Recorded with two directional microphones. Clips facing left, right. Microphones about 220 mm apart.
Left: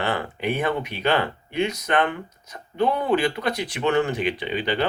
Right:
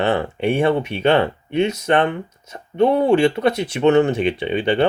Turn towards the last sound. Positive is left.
turn(degrees=-25)  # may be behind; listen again after turning